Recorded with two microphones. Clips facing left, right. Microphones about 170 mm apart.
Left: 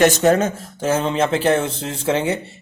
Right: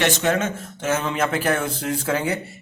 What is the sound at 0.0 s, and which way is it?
A man's voice, 40° left (ahead or behind).